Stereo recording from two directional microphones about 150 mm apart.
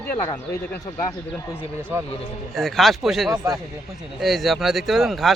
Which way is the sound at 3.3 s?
20° right (ahead or behind).